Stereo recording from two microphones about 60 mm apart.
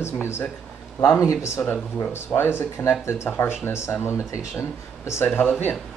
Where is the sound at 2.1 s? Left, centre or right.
Left.